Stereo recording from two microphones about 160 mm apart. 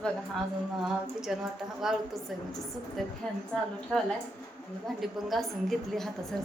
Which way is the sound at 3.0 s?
Centre (ahead or behind).